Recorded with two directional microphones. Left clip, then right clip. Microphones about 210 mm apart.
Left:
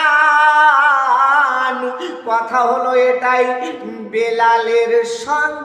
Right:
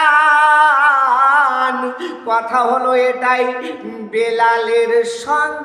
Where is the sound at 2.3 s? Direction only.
10° right (ahead or behind).